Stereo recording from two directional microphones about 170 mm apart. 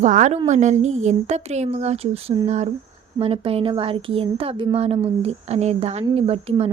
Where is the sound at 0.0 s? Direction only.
45° right (ahead or behind).